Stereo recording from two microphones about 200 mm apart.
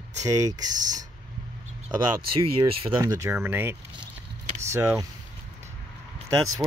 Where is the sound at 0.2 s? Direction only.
15° right (ahead or behind).